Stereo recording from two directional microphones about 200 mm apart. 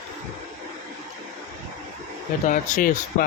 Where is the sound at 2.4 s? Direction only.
40° left (ahead or behind).